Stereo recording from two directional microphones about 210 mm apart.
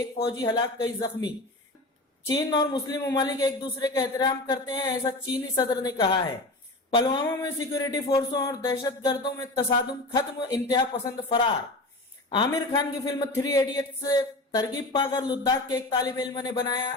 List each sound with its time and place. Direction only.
0.2 s speech: 20° left (ahead or behind)
12.5 s speech: 20° left (ahead or behind)